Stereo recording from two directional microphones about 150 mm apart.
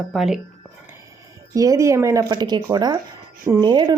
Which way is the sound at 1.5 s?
20° right (ahead or behind).